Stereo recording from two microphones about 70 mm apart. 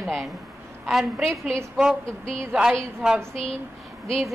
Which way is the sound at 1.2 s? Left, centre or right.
Centre.